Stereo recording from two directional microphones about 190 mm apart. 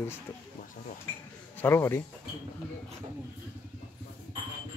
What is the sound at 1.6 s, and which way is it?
Speech, 10° left (ahead or behind).